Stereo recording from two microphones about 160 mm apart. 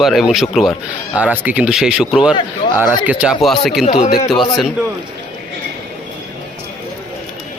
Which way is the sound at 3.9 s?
35° left (ahead or behind).